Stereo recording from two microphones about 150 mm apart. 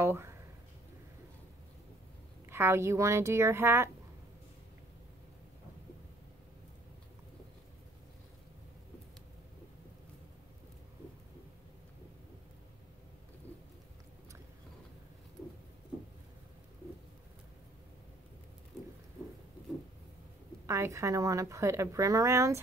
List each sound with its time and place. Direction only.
0.0 s a sound: 20° right (ahead or behind)
2.5 s speech: 15° right (ahead or behind)
20.6 s a woman's voice: 20° right (ahead or behind)